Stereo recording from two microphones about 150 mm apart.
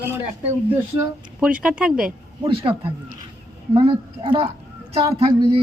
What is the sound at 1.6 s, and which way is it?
Speech, 5° right (ahead or behind).